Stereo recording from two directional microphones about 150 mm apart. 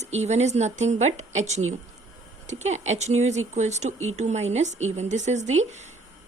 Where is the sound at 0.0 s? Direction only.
45° right (ahead or behind).